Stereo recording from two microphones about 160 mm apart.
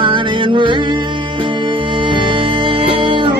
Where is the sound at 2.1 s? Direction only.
30° right (ahead or behind).